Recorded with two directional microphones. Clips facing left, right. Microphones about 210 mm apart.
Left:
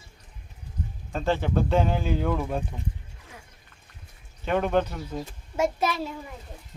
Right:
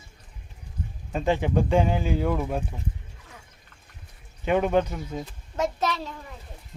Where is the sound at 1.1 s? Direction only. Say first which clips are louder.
Right 2 dB; 10° right (ahead or behind).